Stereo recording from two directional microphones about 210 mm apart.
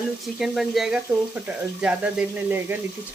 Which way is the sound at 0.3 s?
Centre (ahead or behind).